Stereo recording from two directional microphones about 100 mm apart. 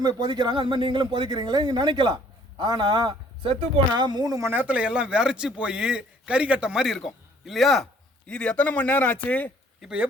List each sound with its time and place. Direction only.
0.0 s a man's voice: 45° right (ahead or behind)
4.4 s speech: 15° right (ahead or behind); by 7.9 s centre (ahead or behind)
8.3 s a man's voice: 10° left (ahead or behind)
9.8 s speech: 10° right (ahead or behind)